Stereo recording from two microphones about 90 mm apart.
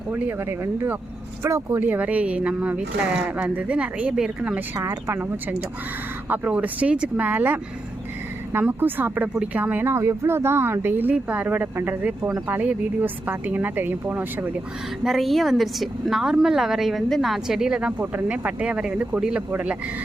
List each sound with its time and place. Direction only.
0.1 s speech: 25° right (ahead or behind)
1.7 s speech: 20° right (ahead or behind)
4.8 s speech: 30° right (ahead or behind)
15.0 s a woman's voice: centre (ahead or behind)